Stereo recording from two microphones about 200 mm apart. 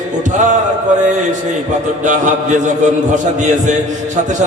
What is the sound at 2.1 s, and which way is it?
A man's voice, 40° right (ahead or behind).